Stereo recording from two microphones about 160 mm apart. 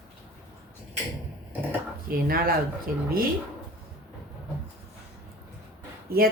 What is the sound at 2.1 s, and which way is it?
Speech, 65° right (ahead or behind).